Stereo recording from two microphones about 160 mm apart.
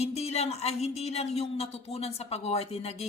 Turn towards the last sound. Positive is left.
turn(degrees=40)  # may be behind; listen again after turning